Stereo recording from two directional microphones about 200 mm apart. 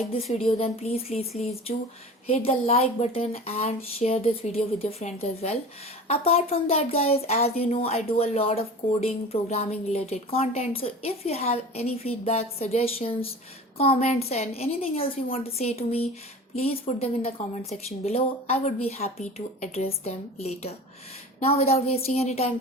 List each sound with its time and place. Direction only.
0.3 s speech: 30° left (ahead or behind)
2.3 s speech: 30° left (ahead or behind)
21.9 s speech: 30° left (ahead or behind)